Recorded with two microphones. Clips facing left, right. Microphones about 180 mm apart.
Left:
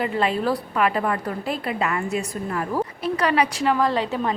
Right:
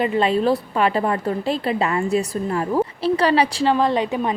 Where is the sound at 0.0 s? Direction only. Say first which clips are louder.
Right 4 dB; 25° right (ahead or behind).